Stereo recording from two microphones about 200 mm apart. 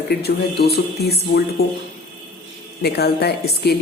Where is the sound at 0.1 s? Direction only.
55° left (ahead or behind).